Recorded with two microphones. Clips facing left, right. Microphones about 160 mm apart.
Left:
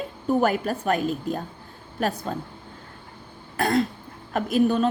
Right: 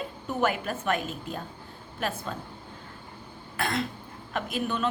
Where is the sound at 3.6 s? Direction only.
40° left (ahead or behind).